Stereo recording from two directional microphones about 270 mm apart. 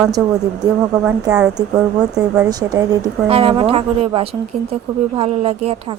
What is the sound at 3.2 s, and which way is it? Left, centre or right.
Speech, right.